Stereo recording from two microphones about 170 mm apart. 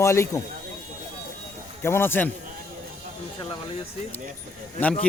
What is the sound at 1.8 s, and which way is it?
Speech, 15° left (ahead or behind).